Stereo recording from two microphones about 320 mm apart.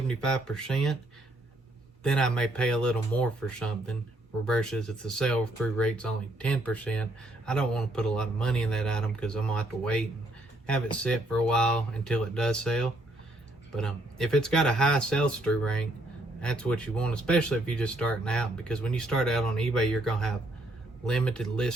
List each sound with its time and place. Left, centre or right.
0.1 s speech: centre
2.0 s speech: centre